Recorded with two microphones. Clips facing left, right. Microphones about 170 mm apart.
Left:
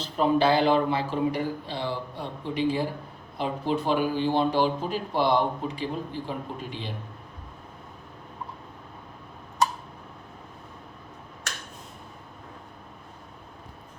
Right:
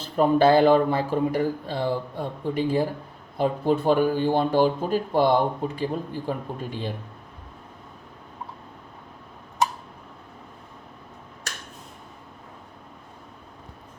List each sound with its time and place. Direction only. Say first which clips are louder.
0.2 s a man's voice: right 4 dB; 50° right (ahead or behind)